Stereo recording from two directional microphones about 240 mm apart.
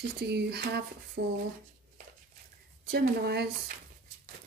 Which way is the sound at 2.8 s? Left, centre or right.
Right.